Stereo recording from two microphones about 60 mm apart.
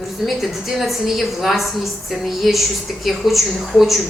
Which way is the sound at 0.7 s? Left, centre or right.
Centre.